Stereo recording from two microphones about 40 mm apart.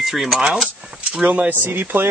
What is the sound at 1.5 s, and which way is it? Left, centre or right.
Speech, right.